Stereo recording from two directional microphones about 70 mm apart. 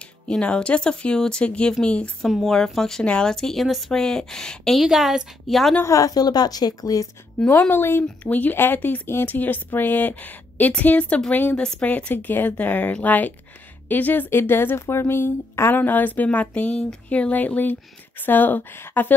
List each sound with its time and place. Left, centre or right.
0.4 s speech: centre
2.2 s speech: centre
4.8 s a woman's voice: centre
5.9 s a woman's voice: left
7.4 s speech: centre
7.7 s speech: left
8.2 s speech: left
15.7 s speech: left